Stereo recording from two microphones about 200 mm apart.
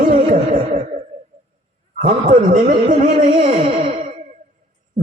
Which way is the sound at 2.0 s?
40° right (ahead or behind).